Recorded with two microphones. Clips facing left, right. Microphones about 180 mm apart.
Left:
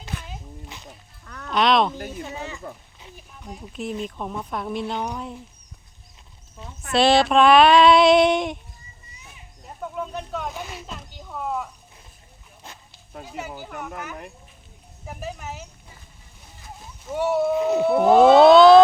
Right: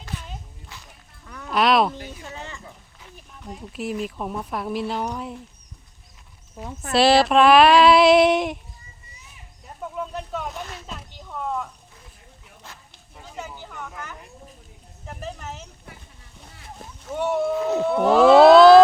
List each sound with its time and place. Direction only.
0.7 s music: 20° left (ahead or behind)
1.2 s a sound: 5° right (ahead or behind)
2.2 s speech: 10° left (ahead or behind)
3.4 s female singing: 5° right (ahead or behind)
6.9 s female singing: 5° right (ahead or behind)
9.9 s a sound: centre (ahead or behind)
13.6 s speech: 10° left (ahead or behind)
17.2 s speech: 5° left (ahead or behind)
18.3 s female singing: centre (ahead or behind)